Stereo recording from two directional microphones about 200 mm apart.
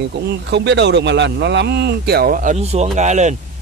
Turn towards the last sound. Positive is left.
turn(degrees=-35)  # may be behind; listen again after turning